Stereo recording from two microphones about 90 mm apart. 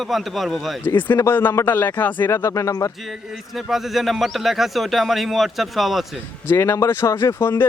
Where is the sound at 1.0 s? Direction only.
25° left (ahead or behind).